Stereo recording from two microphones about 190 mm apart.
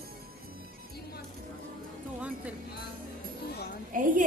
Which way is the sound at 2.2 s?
5° right (ahead or behind).